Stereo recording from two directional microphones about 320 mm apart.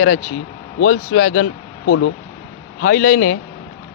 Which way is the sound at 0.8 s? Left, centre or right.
Left.